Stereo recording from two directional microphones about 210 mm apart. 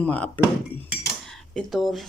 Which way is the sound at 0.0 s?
5° left (ahead or behind).